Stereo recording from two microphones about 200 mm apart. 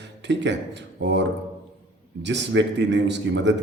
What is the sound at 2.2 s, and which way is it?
A man's voice, 60° right (ahead or behind).